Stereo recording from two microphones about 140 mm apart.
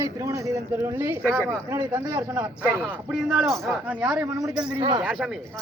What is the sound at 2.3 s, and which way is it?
Speech, 10° right (ahead or behind).